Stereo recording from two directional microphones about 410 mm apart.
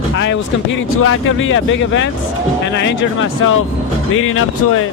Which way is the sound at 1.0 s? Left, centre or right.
Left.